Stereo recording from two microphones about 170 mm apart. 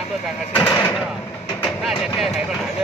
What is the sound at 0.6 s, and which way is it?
Speech, 10° left (ahead or behind).